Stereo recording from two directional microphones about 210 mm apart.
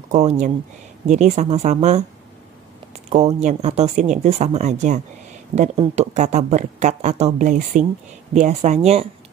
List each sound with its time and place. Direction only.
0.1 s speech: 35° right (ahead or behind)
3.1 s speech: 30° right (ahead or behind)